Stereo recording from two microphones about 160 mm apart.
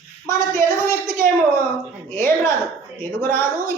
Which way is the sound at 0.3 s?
20° left (ahead or behind).